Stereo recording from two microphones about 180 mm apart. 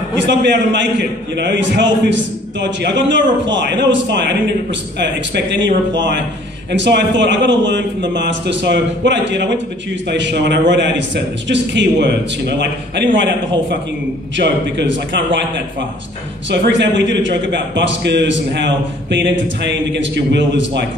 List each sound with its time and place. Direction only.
0.3 s a man's voice: 75° right (ahead or behind)
16.4 s a man's voice: 80° right